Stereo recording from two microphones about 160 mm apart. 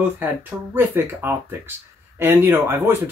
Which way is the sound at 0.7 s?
15° right (ahead or behind).